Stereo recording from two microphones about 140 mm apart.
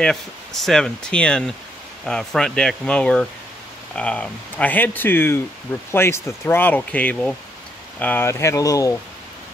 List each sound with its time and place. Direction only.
0.6 s speech: 5° left (ahead or behind); by 8.9 s 25° left (ahead or behind)